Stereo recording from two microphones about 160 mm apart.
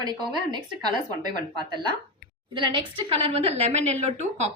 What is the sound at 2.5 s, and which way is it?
A woman's voice, 35° right (ahead or behind).